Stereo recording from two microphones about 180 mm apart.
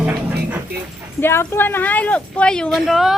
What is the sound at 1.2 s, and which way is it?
Speech, 15° left (ahead or behind).